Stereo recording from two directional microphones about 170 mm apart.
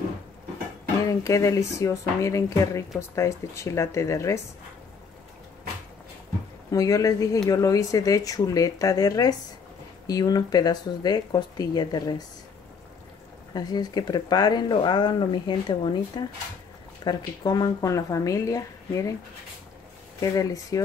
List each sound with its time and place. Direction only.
1.0 s speech: 20° left (ahead or behind)
6.7 s speech: 20° left (ahead or behind)
13.5 s speech: 25° left (ahead or behind)
20.2 s speech: 20° left (ahead or behind)